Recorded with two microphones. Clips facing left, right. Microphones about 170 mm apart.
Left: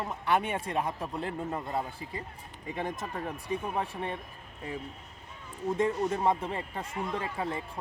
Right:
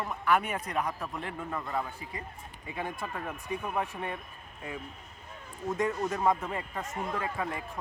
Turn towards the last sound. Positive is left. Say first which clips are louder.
# left 1 dB
turn(degrees=30)  # may be behind; listen again after turning